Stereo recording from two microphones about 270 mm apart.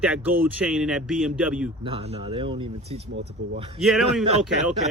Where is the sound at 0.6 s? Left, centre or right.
Centre.